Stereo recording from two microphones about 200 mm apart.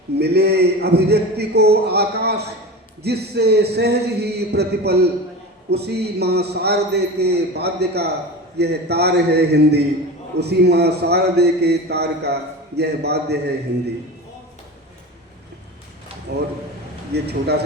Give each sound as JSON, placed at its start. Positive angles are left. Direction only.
{"t": 0.2, "sound": "a man's voice", "side_deg": -55}
{"t": 16.3, "sound": "a man's voice", "side_deg": -50}